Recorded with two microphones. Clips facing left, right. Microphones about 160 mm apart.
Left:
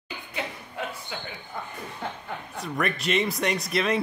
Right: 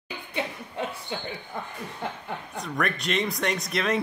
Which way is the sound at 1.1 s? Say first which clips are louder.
Right 3 dB; 30° right (ahead or behind).